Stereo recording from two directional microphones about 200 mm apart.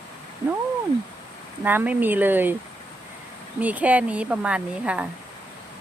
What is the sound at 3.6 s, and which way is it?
A woman's voice, 5° right (ahead or behind).